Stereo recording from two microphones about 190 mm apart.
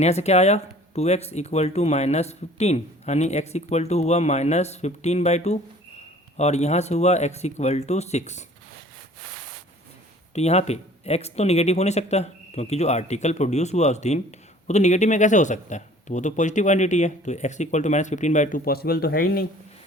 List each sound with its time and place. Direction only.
0.0 s speech: 35° left (ahead or behind)
10.3 s speech: 35° left (ahead or behind); by 19.5 s 50° left (ahead or behind)